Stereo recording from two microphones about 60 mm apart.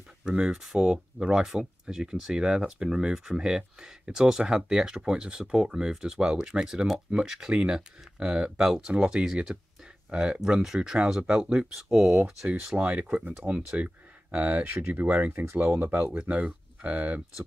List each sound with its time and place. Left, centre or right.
0.5 s speech: centre
11.5 s speech: centre
12.7 s speech: right